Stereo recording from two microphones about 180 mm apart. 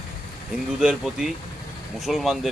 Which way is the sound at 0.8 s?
5° right (ahead or behind).